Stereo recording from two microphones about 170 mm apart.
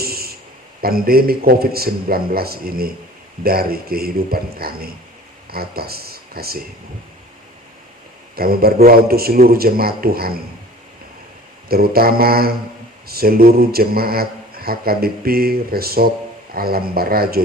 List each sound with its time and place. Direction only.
0.0 s a sound: 65° right (ahead or behind)
0.8 s a man's voice: 60° right (ahead or behind)
8.4 s a man's voice: 60° right (ahead or behind)
11.7 s a man's voice: 60° right (ahead or behind)